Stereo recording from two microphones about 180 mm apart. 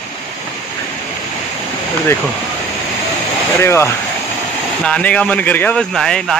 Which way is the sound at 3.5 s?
15° left (ahead or behind).